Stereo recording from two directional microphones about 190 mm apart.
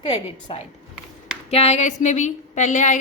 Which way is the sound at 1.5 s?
35° left (ahead or behind).